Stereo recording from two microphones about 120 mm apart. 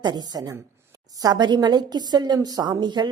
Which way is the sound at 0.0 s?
35° right (ahead or behind).